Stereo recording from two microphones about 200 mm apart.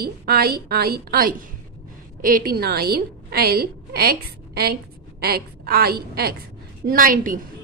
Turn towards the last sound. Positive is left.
turn(degrees=-45)  # may be behind; listen again after turning